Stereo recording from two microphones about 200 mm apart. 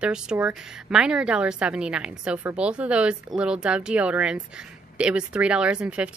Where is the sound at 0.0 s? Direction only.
5° right (ahead or behind).